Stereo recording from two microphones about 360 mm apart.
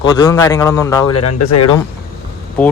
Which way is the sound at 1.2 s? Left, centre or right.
Left.